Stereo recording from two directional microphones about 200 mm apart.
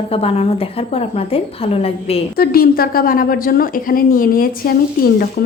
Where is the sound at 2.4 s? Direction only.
50° left (ahead or behind).